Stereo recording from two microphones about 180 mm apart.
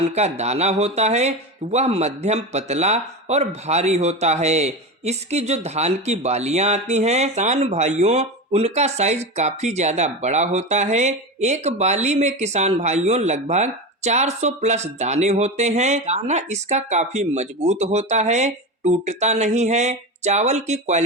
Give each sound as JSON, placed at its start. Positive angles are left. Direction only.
{"t": 0.1, "sound": "speech", "side_deg": -40}